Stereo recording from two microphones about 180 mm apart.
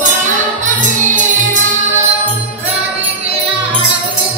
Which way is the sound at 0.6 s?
45° right (ahead or behind).